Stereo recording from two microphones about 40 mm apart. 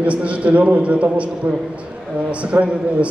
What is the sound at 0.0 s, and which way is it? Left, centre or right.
A man's voice, right.